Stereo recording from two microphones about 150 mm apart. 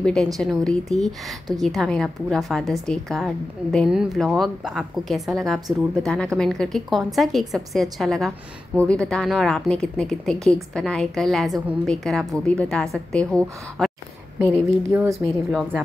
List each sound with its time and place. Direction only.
0.0 s a woman's voice: 5° left (ahead or behind)
14.9 s speech: 15° right (ahead or behind)